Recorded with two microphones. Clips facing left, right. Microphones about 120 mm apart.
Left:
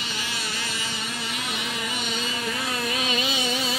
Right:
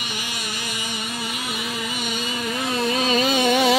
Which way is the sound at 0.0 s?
15° right (ahead or behind).